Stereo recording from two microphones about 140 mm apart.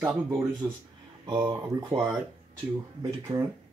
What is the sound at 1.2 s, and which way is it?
Speech, 35° right (ahead or behind).